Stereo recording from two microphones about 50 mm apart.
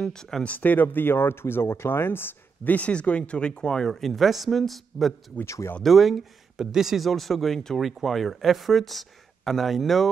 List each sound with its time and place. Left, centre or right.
0.0 s speech: centre
0.5 s speech: left
2.7 s speech: left; by 5.1 s centre
5.4 s speech: left
5.8 s speech: centre